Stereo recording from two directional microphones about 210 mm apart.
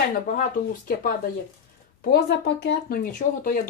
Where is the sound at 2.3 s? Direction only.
55° left (ahead or behind).